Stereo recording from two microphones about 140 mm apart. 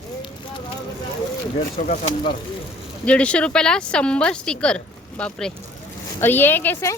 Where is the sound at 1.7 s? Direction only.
70° left (ahead or behind).